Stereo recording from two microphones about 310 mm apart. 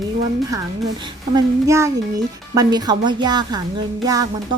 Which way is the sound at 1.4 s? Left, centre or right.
Centre.